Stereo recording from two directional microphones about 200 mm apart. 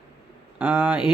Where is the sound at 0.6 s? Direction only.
10° right (ahead or behind).